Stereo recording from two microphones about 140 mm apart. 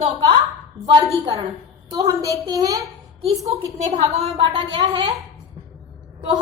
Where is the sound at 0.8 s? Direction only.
20° right (ahead or behind).